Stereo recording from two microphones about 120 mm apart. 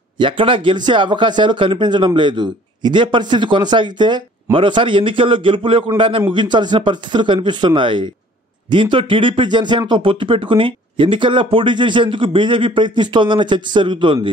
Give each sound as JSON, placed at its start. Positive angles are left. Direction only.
{"t": 0.2, "sound": "speech", "side_deg": -45}